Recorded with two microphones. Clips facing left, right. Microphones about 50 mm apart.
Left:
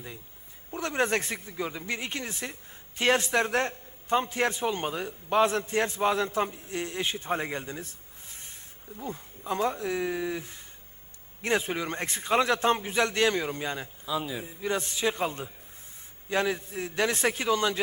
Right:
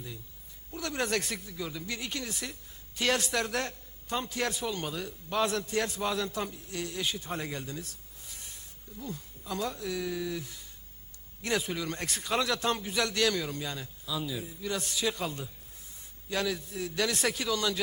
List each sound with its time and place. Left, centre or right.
0.7 s speech: left